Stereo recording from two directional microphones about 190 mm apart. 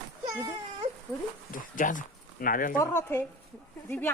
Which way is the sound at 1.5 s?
45° left (ahead or behind).